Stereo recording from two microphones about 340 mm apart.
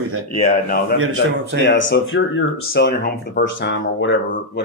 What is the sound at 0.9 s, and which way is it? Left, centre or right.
Speech, right.